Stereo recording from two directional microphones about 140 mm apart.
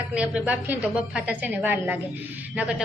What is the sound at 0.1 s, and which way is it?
A woman's voice, 10° right (ahead or behind).